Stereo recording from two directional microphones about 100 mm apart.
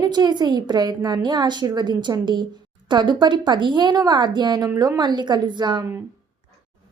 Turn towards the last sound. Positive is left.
turn(degrees=-50)  # may be behind; listen again after turning